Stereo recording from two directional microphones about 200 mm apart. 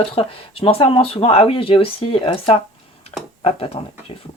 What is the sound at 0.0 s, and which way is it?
Speech, 30° left (ahead or behind).